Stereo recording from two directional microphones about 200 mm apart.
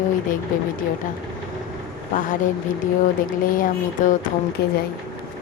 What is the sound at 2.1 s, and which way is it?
Speech, 40° left (ahead or behind).